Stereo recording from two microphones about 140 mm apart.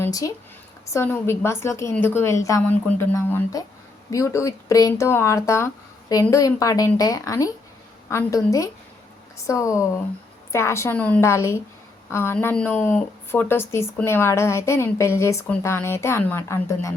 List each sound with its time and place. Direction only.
0.0 s a woman's voice: 25° left (ahead or behind)